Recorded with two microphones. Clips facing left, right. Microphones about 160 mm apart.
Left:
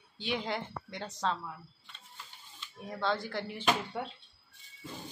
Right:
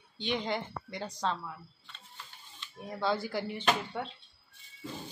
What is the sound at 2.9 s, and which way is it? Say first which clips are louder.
Speech: right 2 dB; 5° right (ahead or behind).